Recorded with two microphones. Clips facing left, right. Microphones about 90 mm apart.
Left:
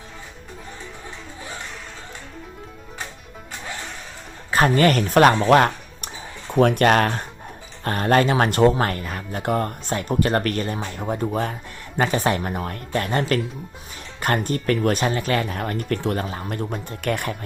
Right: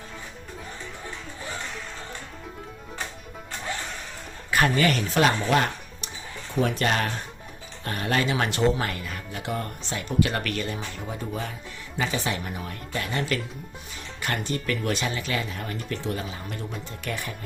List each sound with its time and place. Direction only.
4.7 s speech: 45° left (ahead or behind)